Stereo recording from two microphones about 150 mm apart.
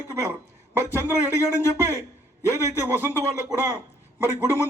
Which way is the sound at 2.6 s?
15° right (ahead or behind).